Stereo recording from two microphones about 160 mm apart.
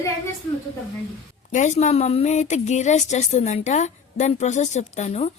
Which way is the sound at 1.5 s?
50° left (ahead or behind).